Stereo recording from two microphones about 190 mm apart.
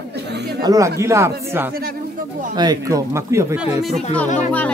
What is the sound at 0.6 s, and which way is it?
Speech, 20° right (ahead or behind).